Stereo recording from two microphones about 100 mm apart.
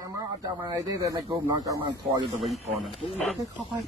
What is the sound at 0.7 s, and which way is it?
Speech, 35° right (ahead or behind).